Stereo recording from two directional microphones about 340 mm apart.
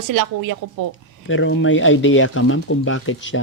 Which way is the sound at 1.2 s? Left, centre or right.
Left.